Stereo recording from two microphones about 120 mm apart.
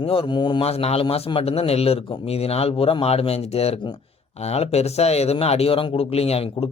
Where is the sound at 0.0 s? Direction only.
50° left (ahead or behind).